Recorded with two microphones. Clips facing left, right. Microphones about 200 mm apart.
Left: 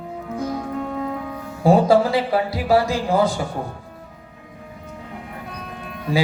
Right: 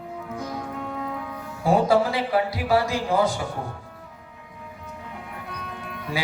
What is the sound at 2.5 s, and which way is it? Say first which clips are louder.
Speech: left 4 dB; 30° left (ahead or behind).